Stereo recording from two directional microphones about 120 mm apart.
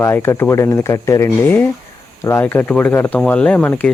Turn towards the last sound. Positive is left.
turn(degrees=15)  # may be behind; listen again after turning